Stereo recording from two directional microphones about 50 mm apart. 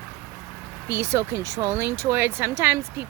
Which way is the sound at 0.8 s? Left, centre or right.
Right.